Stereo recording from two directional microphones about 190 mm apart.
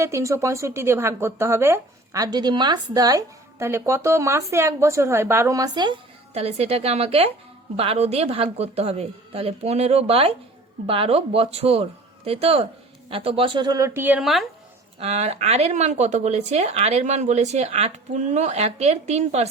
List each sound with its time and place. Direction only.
0.0 s a woman's voice: 15° right (ahead or behind)
14.9 s speech: 35° right (ahead or behind)